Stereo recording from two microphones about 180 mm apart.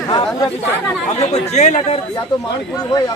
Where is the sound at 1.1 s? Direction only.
35° left (ahead or behind).